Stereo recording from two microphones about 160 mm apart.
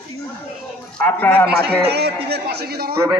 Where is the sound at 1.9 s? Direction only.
90° right.